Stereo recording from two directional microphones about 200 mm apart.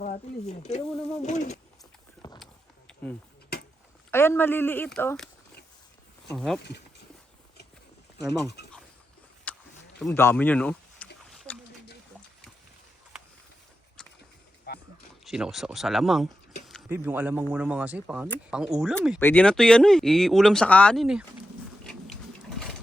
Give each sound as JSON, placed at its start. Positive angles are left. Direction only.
{"t": 0.0, "sound": "speech", "side_deg": 35}
{"t": 0.9, "sound": "speech", "side_deg": 5}
{"t": 1.2, "sound": "speech", "side_deg": 35}
{"t": 2.2, "sound": "a sound", "side_deg": 20}
{"t": 4.1, "sound": "speech", "side_deg": 10}
{"t": 6.3, "sound": "speech", "side_deg": 0}
{"t": 6.6, "sound": "speech", "side_deg": 55}
{"t": 9.5, "sound": "wild animals", "side_deg": 5}
{"t": 10.0, "sound": "speech", "side_deg": 10}
{"t": 11.5, "sound": "a sound", "side_deg": 5}
{"t": 14.7, "sound": "a sound", "side_deg": 55}
{"t": 15.2, "sound": "speech", "side_deg": 0}
{"t": 19.2, "sound": "speech", "side_deg": 5}
{"t": 21.8, "sound": "a sound", "side_deg": 5}